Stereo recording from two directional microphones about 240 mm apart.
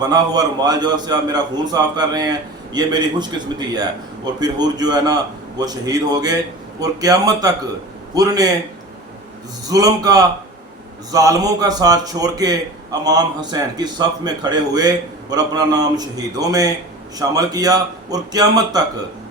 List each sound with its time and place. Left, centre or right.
0.0 s a man's voice: centre
9.6 s a man's voice: centre